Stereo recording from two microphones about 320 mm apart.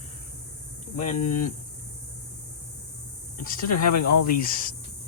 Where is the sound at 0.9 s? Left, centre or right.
Left.